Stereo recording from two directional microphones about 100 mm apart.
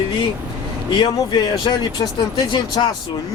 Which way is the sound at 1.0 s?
50° left (ahead or behind).